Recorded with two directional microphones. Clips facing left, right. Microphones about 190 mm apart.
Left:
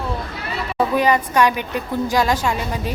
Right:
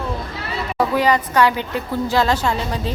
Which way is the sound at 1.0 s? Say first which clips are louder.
Even; 15° left (ahead or behind).